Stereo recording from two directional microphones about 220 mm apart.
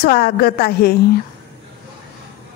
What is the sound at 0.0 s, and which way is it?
Speech, 45° left (ahead or behind).